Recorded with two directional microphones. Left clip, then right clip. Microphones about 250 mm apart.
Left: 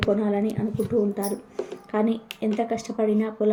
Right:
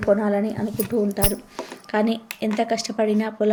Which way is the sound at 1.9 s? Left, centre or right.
Centre.